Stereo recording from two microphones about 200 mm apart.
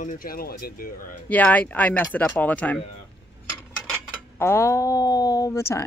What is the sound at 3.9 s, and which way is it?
Speech, 10° left (ahead or behind).